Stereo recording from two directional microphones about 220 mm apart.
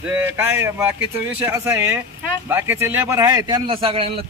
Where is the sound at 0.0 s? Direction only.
10° right (ahead or behind).